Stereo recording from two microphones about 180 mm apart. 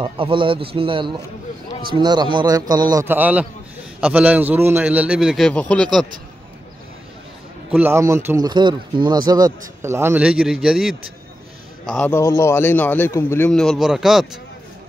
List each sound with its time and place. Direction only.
0.0 s a man's voice: 30° right (ahead or behind); by 6.0 s 5° left (ahead or behind)
7.7 s a man's voice: 15° right (ahead or behind)
8.5 s a man's voice: 25° right (ahead or behind); by 11.0 s 5° right (ahead or behind)
11.9 s a man's voice: 10° left (ahead or behind)